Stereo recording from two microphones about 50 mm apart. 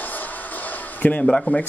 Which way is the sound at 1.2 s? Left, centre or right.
Centre.